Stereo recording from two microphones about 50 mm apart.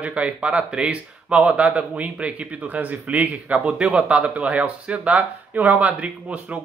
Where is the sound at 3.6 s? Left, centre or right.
Right.